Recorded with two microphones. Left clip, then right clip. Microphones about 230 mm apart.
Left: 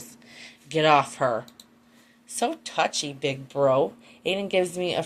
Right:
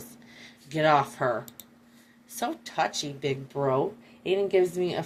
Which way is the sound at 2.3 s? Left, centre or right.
Left.